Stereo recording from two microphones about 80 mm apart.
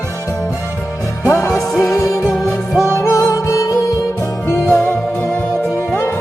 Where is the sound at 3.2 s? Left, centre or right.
Left.